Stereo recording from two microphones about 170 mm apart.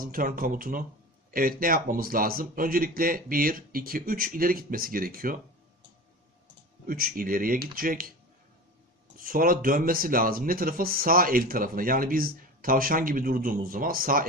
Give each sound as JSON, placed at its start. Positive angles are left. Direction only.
{"t": 0.0, "sound": "speech", "side_deg": -55}
{"t": 6.9, "sound": "speech", "side_deg": -60}
{"t": 9.2, "sound": "speech", "side_deg": -55}